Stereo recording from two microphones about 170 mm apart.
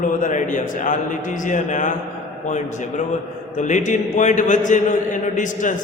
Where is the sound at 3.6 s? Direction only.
45° left (ahead or behind).